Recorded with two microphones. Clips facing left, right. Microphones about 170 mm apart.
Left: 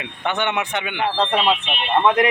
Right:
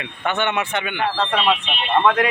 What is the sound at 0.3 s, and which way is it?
Speech, 15° left (ahead or behind).